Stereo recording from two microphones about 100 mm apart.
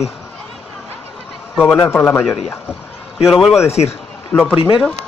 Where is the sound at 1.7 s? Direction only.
25° left (ahead or behind).